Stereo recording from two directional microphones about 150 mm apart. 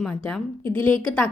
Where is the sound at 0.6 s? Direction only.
10° left (ahead or behind).